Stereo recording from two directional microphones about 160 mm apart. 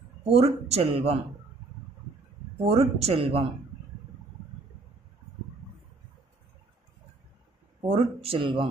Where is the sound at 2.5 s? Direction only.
40° right (ahead or behind).